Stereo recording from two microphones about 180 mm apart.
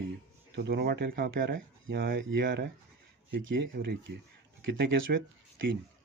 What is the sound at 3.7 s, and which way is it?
Speech, 60° right (ahead or behind).